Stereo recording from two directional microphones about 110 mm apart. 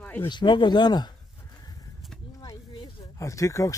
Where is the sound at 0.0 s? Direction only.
15° left (ahead or behind).